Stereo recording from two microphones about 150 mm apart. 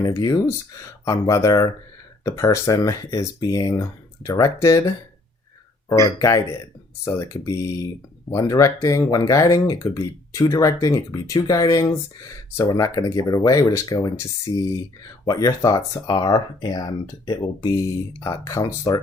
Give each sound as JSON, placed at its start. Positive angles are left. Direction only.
{"t": 0.0, "sound": "speech", "side_deg": 20}
{"t": 5.9, "sound": "speech", "side_deg": 25}